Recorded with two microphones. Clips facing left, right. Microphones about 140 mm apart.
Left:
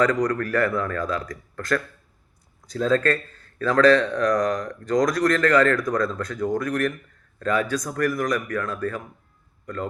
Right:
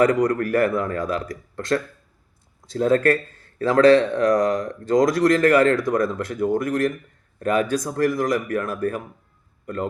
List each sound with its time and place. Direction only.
0.0 s speech: 30° right (ahead or behind)